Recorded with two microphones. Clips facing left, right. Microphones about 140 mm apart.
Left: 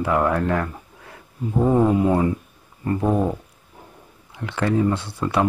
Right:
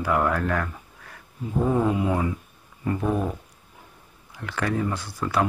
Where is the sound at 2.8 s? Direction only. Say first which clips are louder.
Left 4 dB; 35° left (ahead or behind).